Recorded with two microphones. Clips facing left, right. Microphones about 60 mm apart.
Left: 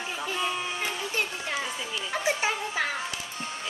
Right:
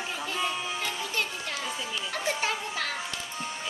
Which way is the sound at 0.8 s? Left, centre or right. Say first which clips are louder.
Left 1 dB; centre.